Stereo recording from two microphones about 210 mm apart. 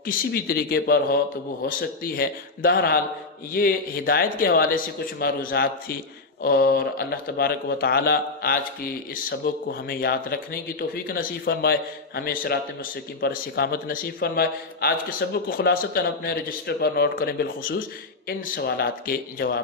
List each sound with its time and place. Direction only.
0.0 s a man's voice: 45° left (ahead or behind)